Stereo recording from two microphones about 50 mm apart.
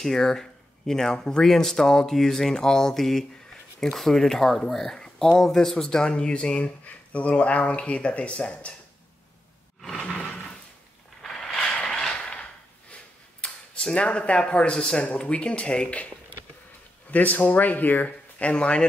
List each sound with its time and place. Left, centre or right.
0.0 s speech: centre
9.8 s a sound: centre
11.2 s mechanisms: centre
13.4 s a sound: centre
13.9 s speech: left
17.1 s speech: left